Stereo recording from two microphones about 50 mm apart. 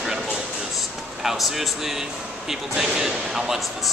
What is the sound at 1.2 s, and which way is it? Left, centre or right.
Speech, centre.